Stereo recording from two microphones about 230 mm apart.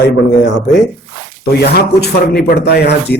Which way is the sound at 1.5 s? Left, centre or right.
Left.